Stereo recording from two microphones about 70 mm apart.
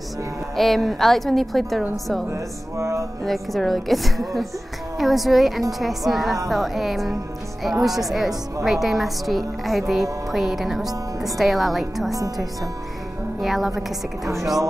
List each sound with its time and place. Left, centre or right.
0.6 s a woman's voice: centre
2.3 s speech: right
3.3 s a woman's voice: centre
12.1 s speech: right
13.4 s a woman's voice: centre